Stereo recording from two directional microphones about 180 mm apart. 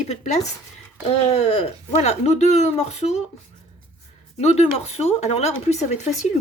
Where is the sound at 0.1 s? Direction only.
40° left (ahead or behind).